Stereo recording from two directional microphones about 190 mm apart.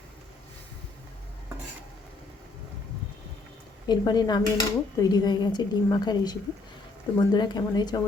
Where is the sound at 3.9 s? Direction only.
20° left (ahead or behind).